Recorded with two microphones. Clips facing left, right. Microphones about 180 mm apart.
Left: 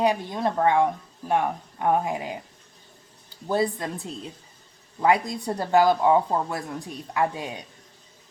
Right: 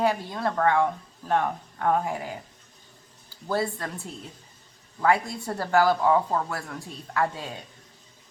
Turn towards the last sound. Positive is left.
turn(degrees=15)  # may be behind; listen again after turning